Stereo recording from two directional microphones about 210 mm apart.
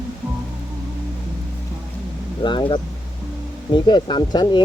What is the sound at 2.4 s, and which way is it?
Speech, 20° left (ahead or behind).